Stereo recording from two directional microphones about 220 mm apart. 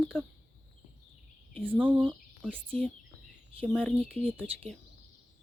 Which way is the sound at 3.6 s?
5° left (ahead or behind).